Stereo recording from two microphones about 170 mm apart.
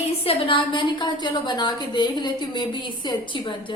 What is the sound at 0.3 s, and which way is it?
A woman's voice, 30° left (ahead or behind).